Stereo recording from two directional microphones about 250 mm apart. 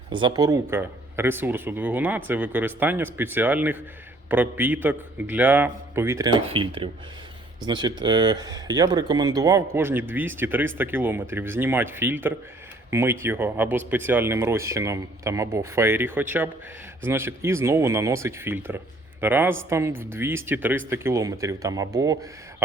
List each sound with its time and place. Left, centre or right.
0.1 s speech: centre